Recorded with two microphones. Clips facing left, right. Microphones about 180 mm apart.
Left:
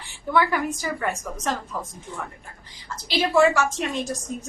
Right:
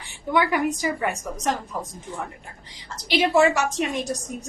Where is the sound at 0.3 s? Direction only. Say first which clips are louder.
Right 1 dB; 15° right (ahead or behind).